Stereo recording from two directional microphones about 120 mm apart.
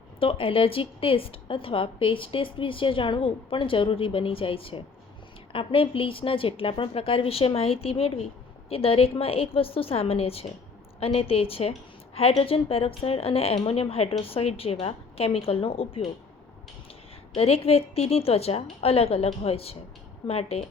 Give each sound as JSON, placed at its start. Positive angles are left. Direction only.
{"t": 0.2, "sound": "a woman's voice", "side_deg": 50}
{"t": 17.3, "sound": "a woman's voice", "side_deg": 55}